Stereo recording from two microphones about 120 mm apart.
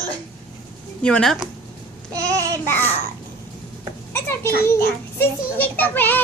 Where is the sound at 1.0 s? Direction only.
10° left (ahead or behind).